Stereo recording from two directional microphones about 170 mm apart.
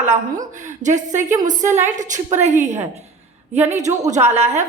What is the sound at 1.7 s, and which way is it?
A woman's voice, 15° right (ahead or behind).